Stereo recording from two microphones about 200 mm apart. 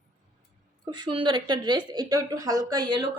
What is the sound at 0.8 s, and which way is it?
A woman's voice, 20° right (ahead or behind).